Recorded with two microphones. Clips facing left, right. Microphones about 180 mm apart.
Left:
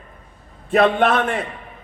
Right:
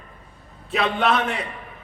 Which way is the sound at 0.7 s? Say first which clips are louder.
Left 6 dB; 50° left (ahead or behind).